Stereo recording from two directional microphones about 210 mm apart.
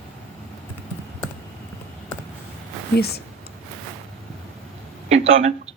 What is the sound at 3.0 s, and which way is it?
Speech, 50° left (ahead or behind).